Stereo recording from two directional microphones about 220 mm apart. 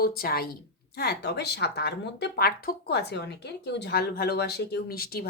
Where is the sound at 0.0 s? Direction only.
45° left (ahead or behind).